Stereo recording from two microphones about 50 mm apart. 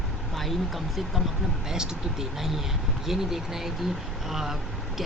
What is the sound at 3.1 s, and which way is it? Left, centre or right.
A woman's voice, centre.